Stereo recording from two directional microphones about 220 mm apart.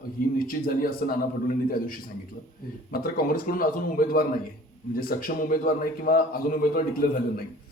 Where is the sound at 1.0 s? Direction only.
40° left (ahead or behind).